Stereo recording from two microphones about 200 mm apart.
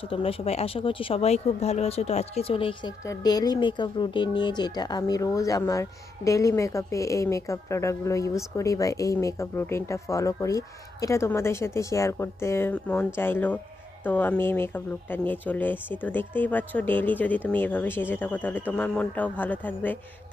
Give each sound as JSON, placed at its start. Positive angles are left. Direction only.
{"t": 0.1, "sound": "speech", "side_deg": 30}